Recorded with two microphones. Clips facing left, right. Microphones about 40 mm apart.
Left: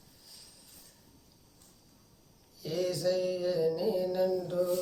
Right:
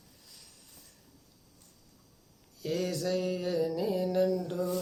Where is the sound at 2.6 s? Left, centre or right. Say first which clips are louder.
Left 1 dB; right.